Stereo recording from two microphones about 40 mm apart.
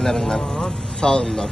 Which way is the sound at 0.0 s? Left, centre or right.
Centre.